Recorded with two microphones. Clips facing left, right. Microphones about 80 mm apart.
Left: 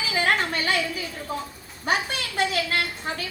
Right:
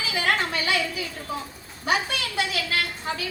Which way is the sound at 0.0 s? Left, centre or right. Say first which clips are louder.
Left 1 dB; left.